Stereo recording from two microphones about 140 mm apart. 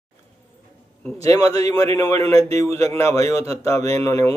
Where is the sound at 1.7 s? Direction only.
25° left (ahead or behind).